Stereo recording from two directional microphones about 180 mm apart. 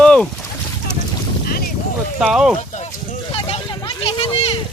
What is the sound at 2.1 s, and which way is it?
Speech, 5° right (ahead or behind).